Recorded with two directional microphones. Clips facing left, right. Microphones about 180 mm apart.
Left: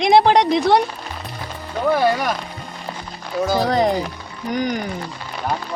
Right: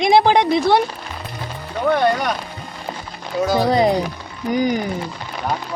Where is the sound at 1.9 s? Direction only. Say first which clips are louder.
Even; 5° left (ahead or behind).